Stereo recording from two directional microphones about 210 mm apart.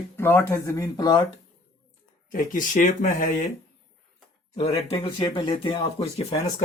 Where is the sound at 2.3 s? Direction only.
40° left (ahead or behind).